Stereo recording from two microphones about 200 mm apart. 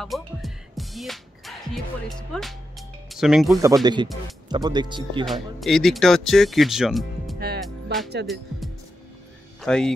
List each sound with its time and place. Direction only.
0.0 s music: centre (ahead or behind)
2.0 s speech: centre (ahead or behind)
3.8 s speech: 20° right (ahead or behind)
5.2 s speech: centre (ahead or behind)
7.3 s music: 55° right (ahead or behind)
7.6 s music: centre (ahead or behind)
9.6 s speech: 5° left (ahead or behind)